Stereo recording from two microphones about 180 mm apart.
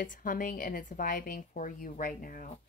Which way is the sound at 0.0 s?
50° left (ahead or behind).